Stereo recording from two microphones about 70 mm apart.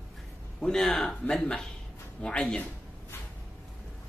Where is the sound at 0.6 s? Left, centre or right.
Centre.